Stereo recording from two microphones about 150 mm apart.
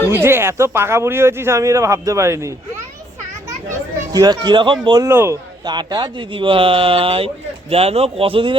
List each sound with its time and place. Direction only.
0.1 s speech: 15° right (ahead or behind)
4.1 s a man's voice: 25° right (ahead or behind)
5.0 s speech: 15° right (ahead or behind)
5.6 s speech: 30° right (ahead or behind)